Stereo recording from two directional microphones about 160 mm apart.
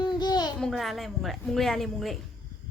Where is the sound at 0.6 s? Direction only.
Centre (ahead or behind).